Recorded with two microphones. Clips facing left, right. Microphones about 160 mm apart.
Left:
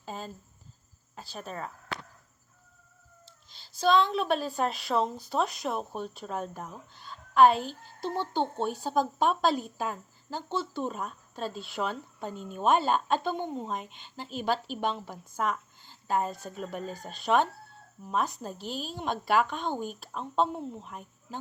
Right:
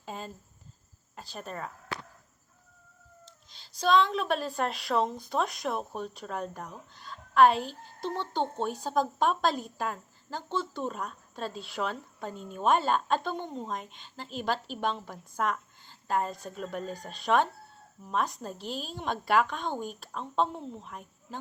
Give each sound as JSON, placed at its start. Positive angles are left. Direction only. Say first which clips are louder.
{"t": 0.0, "sound": "a sound", "louder": "left 1 dB", "side_deg": 0}
{"t": 1.1, "sound": "speech", "louder": "even", "side_deg": 0}
{"t": 3.5, "sound": "a woman's voice", "louder": "even", "side_deg": 5}